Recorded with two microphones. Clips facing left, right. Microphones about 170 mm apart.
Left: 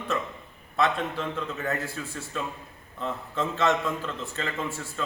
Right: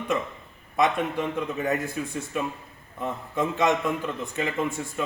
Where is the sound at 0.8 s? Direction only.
15° right (ahead or behind).